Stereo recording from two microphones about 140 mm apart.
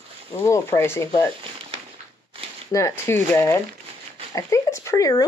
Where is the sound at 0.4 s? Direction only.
20° left (ahead or behind).